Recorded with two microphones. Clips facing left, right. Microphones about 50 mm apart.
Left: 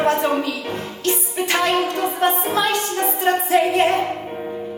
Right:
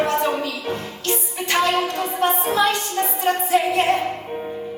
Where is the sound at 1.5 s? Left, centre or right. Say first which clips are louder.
Even; left.